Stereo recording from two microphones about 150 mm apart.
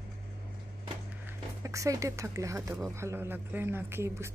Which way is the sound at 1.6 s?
20° right (ahead or behind).